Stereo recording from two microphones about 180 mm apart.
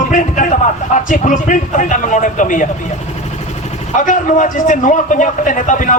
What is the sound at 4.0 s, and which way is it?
Speech, 45° left (ahead or behind).